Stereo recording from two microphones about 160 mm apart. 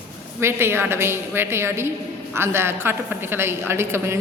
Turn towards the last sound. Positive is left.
turn(degrees=-15)  # may be behind; listen again after turning